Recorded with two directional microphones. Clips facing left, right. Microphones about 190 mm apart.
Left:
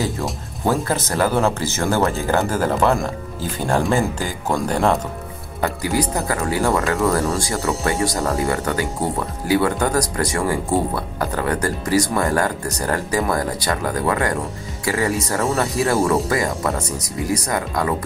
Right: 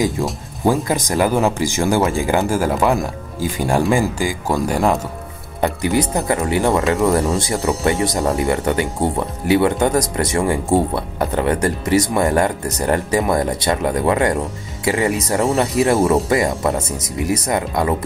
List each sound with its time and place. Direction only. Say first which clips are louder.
0.7 s speech: right 3 dB; 15° right (ahead or behind)
5.6 s speech: right 3 dB; 20° right (ahead or behind)